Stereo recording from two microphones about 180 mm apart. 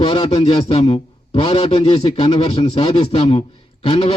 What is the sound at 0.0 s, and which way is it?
A man's voice, 30° left (ahead or behind).